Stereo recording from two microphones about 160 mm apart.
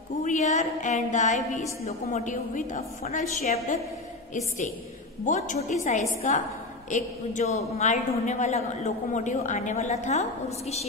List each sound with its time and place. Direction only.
0.2 s a woman's voice: 50° left (ahead or behind)
2.3 s a woman's voice: 55° left (ahead or behind)
5.2 s a woman's voice: 50° left (ahead or behind)